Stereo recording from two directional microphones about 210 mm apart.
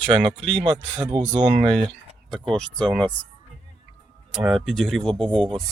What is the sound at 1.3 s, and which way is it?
Speech, 20° right (ahead or behind).